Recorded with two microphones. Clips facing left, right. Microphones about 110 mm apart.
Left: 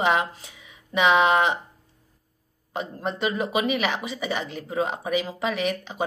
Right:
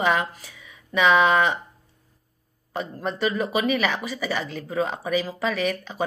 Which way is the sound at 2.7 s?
20° left (ahead or behind).